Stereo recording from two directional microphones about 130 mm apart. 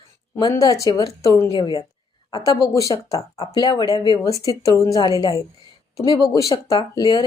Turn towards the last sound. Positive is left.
turn(degrees=30)  # may be behind; listen again after turning